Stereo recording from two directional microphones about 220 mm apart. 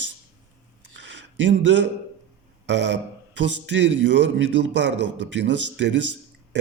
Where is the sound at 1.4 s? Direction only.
55° right (ahead or behind).